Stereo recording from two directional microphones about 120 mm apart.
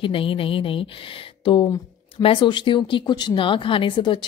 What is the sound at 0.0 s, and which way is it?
Speech, 50° left (ahead or behind).